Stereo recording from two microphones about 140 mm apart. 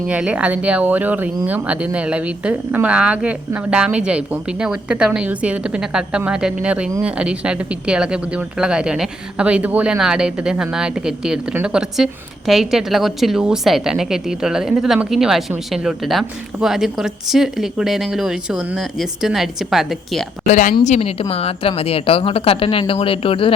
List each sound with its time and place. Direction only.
0.1 s a woman's voice: 10° right (ahead or behind)
20.5 s speech: 60° left (ahead or behind)
20.8 s a woman's voice: 50° left (ahead or behind)